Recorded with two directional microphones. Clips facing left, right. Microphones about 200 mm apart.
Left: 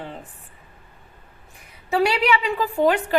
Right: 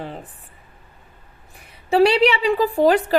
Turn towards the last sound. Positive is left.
turn(degrees=-35)  # may be behind; listen again after turning